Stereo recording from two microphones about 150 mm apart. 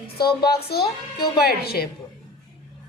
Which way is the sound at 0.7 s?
90° left.